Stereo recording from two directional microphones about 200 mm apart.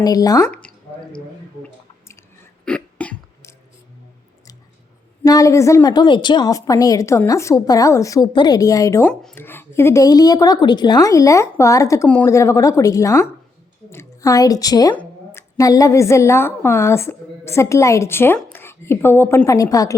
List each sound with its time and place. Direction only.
0.0 s a woman's voice: 20° left (ahead or behind)
0.4 s a sound: 5° left (ahead or behind)
1.6 s drip: 15° left (ahead or behind)
2.6 s throat clearing: 5° left (ahead or behind)
5.2 s a woman's voice: 15° left (ahead or behind)